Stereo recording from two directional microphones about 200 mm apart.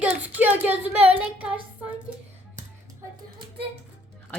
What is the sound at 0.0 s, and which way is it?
Child singing, 10° right (ahead or behind).